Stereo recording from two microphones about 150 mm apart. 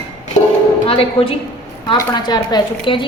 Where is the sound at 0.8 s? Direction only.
40° left (ahead or behind).